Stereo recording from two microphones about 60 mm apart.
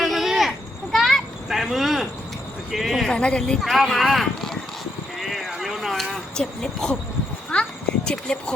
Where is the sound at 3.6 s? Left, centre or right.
Centre.